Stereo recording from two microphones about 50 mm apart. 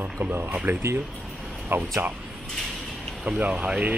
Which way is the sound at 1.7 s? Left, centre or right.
Right.